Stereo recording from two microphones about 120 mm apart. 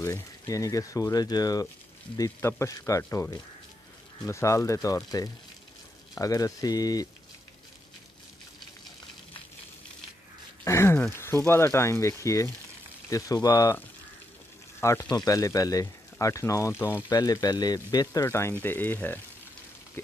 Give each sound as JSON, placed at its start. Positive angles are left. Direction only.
{"t": 0.0, "sound": "speech", "side_deg": 25}
{"t": 10.6, "sound": "a sound", "side_deg": 20}
{"t": 11.4, "sound": "speech", "side_deg": 20}
{"t": 14.8, "sound": "speech", "side_deg": 25}
{"t": 17.1, "sound": "speech", "side_deg": 30}